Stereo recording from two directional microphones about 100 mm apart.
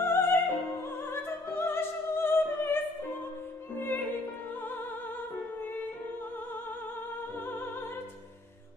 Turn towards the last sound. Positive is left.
turn(degrees=20)  # may be behind; listen again after turning